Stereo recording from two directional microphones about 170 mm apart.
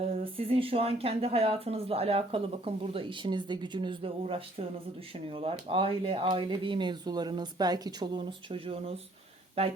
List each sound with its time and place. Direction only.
0.0 s speech: 35° right (ahead or behind)